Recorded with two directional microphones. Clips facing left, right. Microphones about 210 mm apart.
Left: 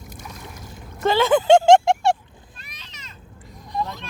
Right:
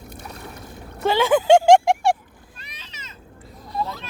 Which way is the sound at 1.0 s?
10° right (ahead or behind).